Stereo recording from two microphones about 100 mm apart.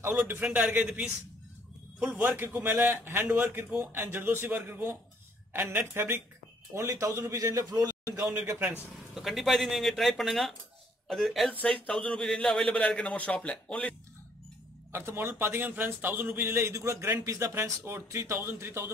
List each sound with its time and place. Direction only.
0.0 s speech: 20° right (ahead or behind)
0.6 s a man's voice: 5° right (ahead or behind)
2.1 s a man's voice: 20° right (ahead or behind); by 8.3 s 35° right (ahead or behind)
9.1 s a man's voice: centre (ahead or behind)
14.9 s speech: 25° right (ahead or behind)